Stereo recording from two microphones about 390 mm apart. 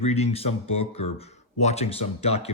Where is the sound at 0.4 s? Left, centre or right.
Left.